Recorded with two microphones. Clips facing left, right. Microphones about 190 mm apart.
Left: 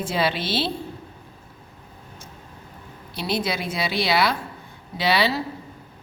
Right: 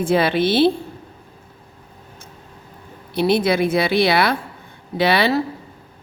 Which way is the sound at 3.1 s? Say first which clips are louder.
Right 9 dB; 60° right (ahead or behind).